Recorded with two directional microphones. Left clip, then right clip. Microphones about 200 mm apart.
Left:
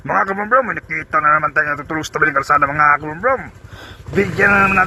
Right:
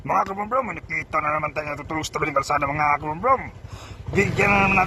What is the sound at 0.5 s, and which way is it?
Speech, 45° left (ahead or behind).